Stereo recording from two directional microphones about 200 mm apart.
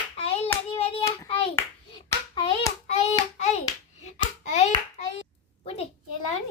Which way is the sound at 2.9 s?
35° left (ahead or behind).